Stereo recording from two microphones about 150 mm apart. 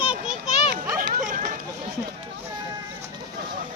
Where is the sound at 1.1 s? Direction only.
60° right (ahead or behind).